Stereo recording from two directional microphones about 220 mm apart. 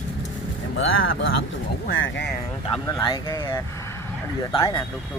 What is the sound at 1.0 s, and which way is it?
Speech, 65° left (ahead or behind).